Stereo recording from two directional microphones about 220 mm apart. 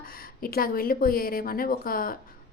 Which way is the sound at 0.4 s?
40° left (ahead or behind).